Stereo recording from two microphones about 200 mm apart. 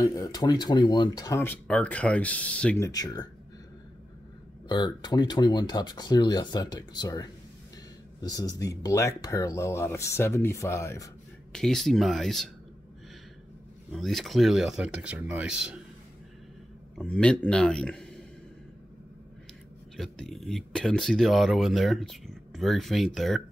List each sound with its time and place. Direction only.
0.0 s speech: 15° left (ahead or behind)
2.9 s speech: 20° left (ahead or behind)
4.6 s speech: 20° left (ahead or behind)
11.5 s speech: centre (ahead or behind)
13.9 s speech: centre (ahead or behind)
17.0 s speech: 5° left (ahead or behind)
20.0 s speech: centre (ahead or behind)